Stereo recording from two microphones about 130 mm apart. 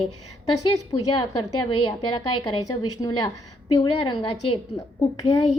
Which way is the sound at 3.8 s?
45° left (ahead or behind).